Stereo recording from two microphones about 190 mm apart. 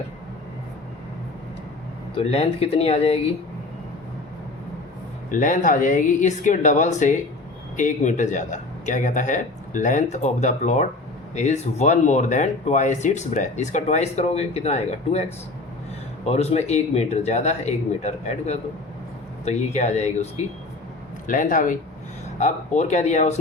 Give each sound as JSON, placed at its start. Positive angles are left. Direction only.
{"t": 2.1, "sound": "speech", "side_deg": 30}
{"t": 5.3, "sound": "speech", "side_deg": 45}